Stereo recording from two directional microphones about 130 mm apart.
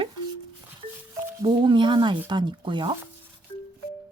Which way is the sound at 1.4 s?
40° right (ahead or behind).